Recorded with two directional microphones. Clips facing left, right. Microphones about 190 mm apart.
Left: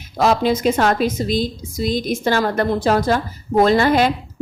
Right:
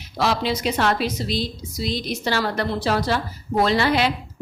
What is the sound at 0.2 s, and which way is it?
Speech, 45° left (ahead or behind).